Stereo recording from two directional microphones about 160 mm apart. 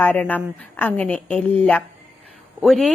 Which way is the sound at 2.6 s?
Centre (ahead or behind).